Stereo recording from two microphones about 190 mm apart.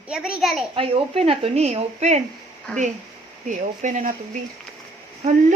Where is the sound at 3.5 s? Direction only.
40° right (ahead or behind).